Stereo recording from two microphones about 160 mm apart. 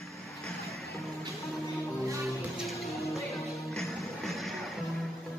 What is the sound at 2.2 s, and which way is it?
Music, centre (ahead or behind).